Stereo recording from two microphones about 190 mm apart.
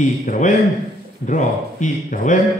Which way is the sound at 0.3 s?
40° left (ahead or behind).